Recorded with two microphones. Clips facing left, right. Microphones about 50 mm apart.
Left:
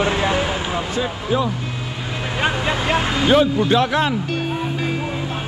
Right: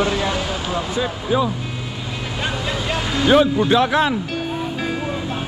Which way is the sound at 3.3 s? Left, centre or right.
Right.